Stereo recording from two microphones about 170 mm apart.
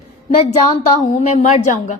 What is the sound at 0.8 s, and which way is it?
A woman's voice, 45° left (ahead or behind).